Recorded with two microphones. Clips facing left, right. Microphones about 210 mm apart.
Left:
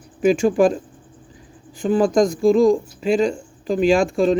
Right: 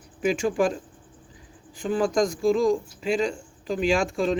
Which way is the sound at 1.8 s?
35° left (ahead or behind).